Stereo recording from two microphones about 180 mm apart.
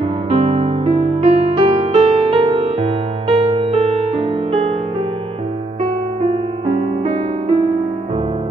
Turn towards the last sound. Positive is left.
turn(degrees=-35)  # may be behind; listen again after turning